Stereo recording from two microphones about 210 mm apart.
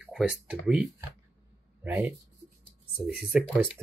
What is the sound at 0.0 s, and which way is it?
Speech, 5° right (ahead or behind).